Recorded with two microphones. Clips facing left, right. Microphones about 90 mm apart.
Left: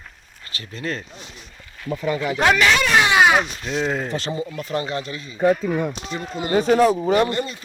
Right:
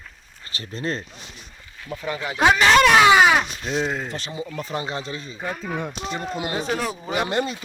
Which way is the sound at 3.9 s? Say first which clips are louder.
Left 3 dB; centre (ahead or behind).